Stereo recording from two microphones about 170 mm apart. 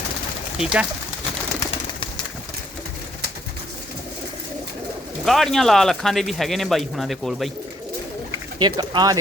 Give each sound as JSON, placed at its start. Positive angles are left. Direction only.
{"t": 0.6, "sound": "speech", "side_deg": -5}
{"t": 5.2, "sound": "speech", "side_deg": 0}
{"t": 8.5, "sound": "speech", "side_deg": -25}